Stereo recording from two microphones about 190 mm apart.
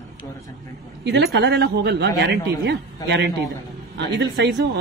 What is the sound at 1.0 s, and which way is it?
A man's voice, 60° right (ahead or behind).